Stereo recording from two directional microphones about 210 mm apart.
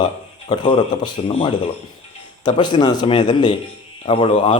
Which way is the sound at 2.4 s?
20° left (ahead or behind).